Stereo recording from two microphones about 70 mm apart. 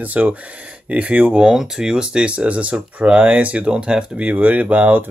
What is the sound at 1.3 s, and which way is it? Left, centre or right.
Speech, centre.